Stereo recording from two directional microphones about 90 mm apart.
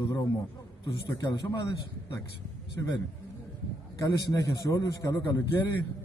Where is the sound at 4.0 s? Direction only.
40° left (ahead or behind).